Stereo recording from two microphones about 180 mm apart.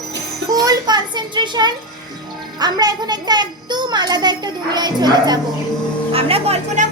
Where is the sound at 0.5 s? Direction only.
20° right (ahead or behind).